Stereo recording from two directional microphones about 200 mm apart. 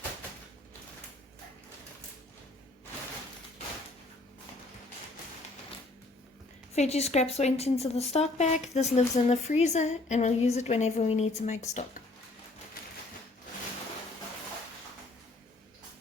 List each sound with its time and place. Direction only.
6.7 s speech: 30° left (ahead or behind)
12.8 s typewriter: 45° left (ahead or behind)